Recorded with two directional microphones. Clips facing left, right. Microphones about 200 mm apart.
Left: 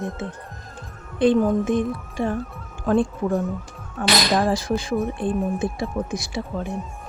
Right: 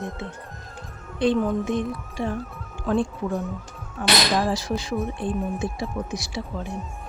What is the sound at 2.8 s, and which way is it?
Speech, 50° left (ahead or behind).